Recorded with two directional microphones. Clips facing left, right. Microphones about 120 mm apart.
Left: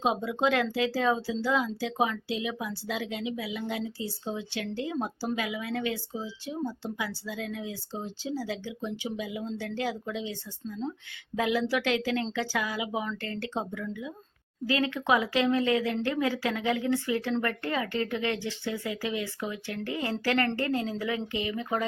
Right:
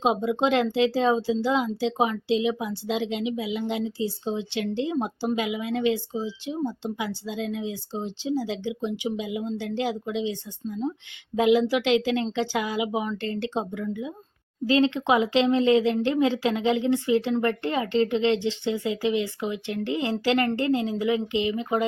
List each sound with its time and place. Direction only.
0.0 s speech: 20° right (ahead or behind)